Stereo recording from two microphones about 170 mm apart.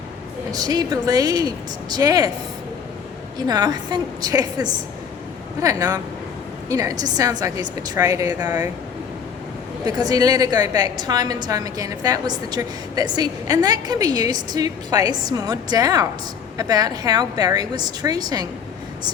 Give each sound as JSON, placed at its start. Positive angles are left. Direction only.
{"t": 0.5, "sound": "a woman's voice", "side_deg": -25}
{"t": 3.3, "sound": "a woman's voice", "side_deg": -25}
{"t": 9.8, "sound": "a woman's voice", "side_deg": -25}